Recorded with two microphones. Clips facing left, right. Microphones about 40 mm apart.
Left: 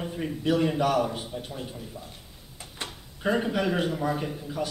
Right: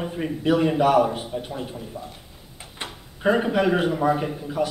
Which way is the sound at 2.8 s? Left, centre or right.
Right.